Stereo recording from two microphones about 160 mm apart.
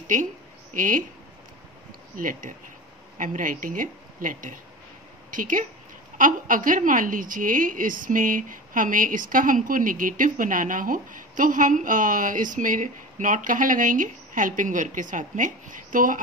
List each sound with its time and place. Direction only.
0.0 s a woman's voice: 55° right (ahead or behind)
2.1 s a woman's voice: 55° right (ahead or behind)